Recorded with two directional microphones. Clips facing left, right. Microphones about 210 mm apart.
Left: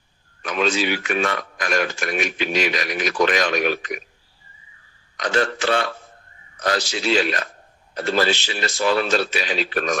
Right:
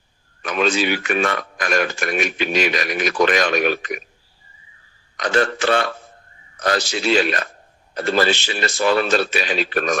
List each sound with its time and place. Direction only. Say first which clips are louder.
0.4 s speech: right 2 dB; 55° right (ahead or behind)
5.1 s speech: right 2 dB; 55° right (ahead or behind)